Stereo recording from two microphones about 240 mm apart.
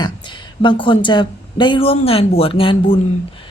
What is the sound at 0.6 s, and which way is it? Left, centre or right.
Speech, centre.